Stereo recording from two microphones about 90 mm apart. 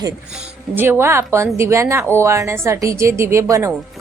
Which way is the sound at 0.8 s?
25° right (ahead or behind).